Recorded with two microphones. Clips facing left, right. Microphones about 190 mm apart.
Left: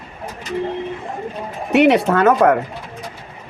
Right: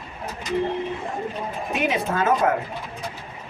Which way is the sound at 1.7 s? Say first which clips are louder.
Left 11 dB; 70° left (ahead or behind).